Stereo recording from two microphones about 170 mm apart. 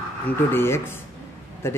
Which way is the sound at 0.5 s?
15° left (ahead or behind).